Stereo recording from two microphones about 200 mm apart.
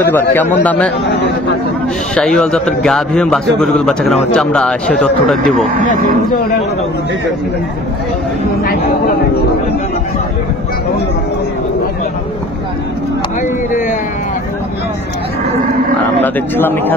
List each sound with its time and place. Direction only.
0.0 s a man's voice: 10° left (ahead or behind)
2.1 s a man's voice: centre (ahead or behind)
13.4 s a sound: 40° left (ahead or behind)
16.2 s speech: 10° left (ahead or behind)